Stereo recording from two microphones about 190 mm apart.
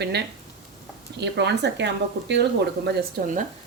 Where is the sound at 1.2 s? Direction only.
65° right (ahead or behind).